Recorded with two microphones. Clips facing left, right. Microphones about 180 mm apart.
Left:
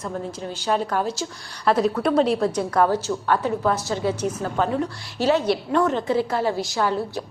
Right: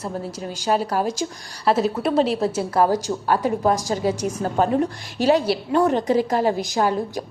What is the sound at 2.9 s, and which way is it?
Speech, 10° right (ahead or behind).